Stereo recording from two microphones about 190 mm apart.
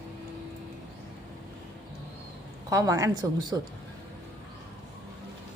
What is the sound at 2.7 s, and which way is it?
Speech, 15° right (ahead or behind).